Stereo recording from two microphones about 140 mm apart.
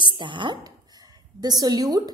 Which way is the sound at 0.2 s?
35° right (ahead or behind).